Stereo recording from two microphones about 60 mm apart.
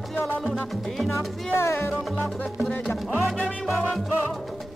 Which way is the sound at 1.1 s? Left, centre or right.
Left.